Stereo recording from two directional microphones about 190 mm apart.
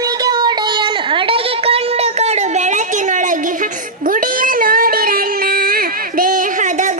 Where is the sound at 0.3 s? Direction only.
20° right (ahead or behind).